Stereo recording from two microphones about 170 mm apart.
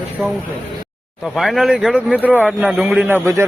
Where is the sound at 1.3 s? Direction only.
Centre (ahead or behind).